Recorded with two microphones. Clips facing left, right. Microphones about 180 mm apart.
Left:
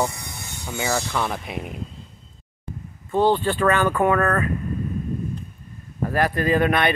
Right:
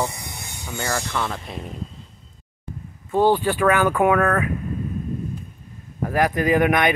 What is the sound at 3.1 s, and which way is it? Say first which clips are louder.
Speech: right 1 dB; 10° right (ahead or behind).